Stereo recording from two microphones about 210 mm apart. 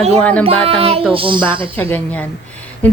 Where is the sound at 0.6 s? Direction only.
30° right (ahead or behind).